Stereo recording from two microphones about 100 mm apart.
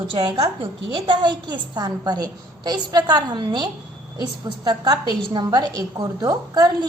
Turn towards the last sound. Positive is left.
turn(degrees=-45)  # may be behind; listen again after turning